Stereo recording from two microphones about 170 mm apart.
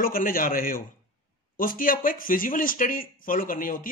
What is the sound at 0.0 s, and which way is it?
Speech, 55° left (ahead or behind).